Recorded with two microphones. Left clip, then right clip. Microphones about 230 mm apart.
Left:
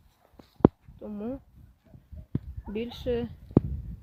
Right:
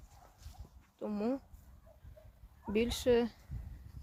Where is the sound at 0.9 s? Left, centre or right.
Centre.